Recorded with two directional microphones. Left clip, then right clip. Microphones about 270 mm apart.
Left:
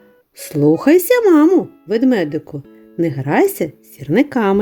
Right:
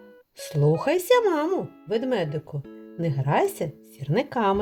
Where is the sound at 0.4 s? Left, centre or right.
Left.